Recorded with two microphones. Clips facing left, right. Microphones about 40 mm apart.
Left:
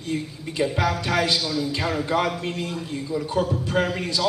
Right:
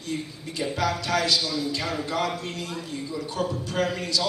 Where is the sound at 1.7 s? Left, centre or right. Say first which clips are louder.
Left 4 dB; left.